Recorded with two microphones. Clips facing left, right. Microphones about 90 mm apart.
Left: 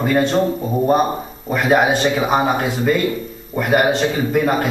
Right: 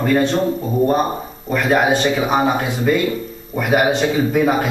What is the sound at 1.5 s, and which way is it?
Speech, 5° left (ahead or behind).